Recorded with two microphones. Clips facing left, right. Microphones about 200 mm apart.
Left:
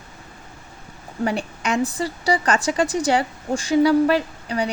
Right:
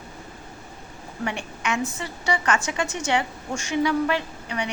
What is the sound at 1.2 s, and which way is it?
A woman's voice, 35° left (ahead or behind).